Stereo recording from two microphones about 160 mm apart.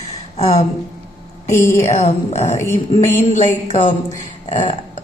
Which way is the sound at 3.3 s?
50° left (ahead or behind).